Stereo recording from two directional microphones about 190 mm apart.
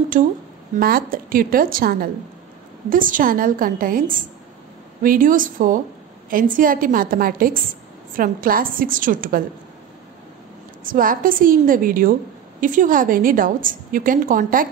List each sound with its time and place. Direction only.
0.2 s a woman's voice: 45° right (ahead or behind)
10.8 s a woman's voice: 45° right (ahead or behind)